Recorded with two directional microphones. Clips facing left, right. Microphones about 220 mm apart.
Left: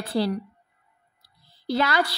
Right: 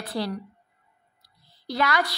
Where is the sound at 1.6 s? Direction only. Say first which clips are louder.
Left 2 dB; 30° left (ahead or behind).